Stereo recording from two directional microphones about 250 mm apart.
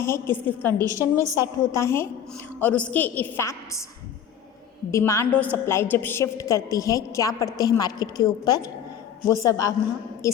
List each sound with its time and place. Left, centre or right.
0.0 s a woman's voice: centre
0.9 s a woman's voice: centre
1.6 s a woman's voice: centre
4.9 s a woman's voice: centre